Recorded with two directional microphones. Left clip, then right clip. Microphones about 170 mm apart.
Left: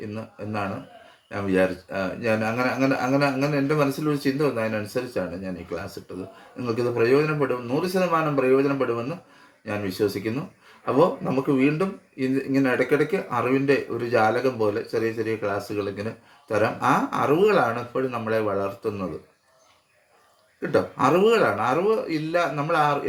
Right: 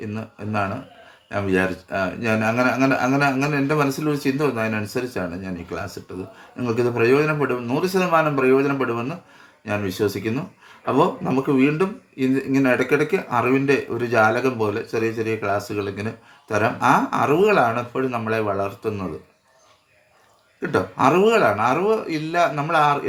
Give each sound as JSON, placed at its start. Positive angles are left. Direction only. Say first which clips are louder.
{"t": 0.1, "sound": "speech", "louder": "right 4 dB", "side_deg": -30}
{"t": 20.6, "sound": "speech", "louder": "right 2 dB", "side_deg": -25}